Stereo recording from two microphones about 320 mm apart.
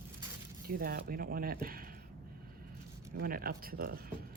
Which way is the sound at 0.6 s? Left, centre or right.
Right.